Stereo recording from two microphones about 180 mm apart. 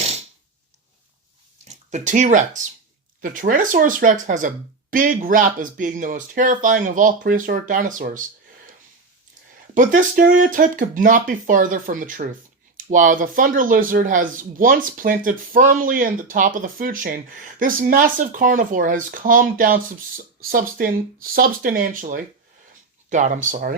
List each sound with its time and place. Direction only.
0.0 s a sound: 35° right (ahead or behind)
1.6 s speech: 40° right (ahead or behind)
9.7 s speech: 45° right (ahead or behind)